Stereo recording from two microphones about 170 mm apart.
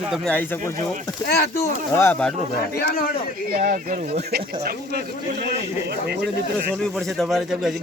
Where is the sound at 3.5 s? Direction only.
55° right (ahead or behind).